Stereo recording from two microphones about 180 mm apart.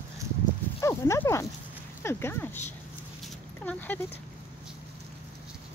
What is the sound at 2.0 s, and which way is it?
Speech, 15° left (ahead or behind).